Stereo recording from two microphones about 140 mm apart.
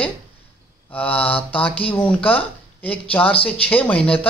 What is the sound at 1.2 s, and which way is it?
Mantra, 40° left (ahead or behind).